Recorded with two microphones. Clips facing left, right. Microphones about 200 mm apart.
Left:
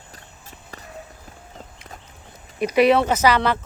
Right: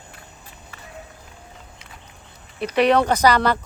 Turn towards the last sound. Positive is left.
turn(degrees=5)  # may be behind; listen again after turning